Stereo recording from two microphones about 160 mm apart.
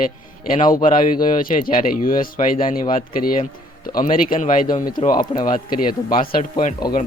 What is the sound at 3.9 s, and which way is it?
Speech, 60° left (ahead or behind).